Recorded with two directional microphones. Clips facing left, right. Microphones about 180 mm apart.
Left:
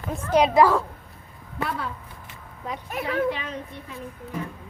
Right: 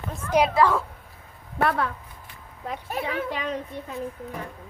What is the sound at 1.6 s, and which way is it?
Speech, 60° right (ahead or behind).